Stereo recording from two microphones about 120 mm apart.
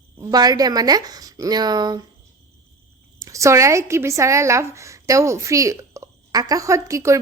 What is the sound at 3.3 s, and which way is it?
A woman's voice, 25° right (ahead or behind).